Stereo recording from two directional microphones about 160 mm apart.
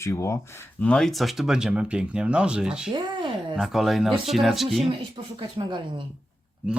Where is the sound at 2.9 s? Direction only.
30° right (ahead or behind).